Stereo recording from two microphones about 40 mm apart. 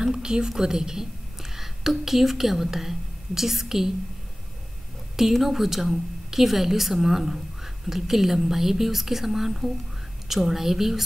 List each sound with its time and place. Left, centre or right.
0.0 s a woman's voice: centre
5.3 s speech: centre